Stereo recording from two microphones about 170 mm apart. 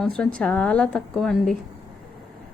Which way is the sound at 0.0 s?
5° left (ahead or behind).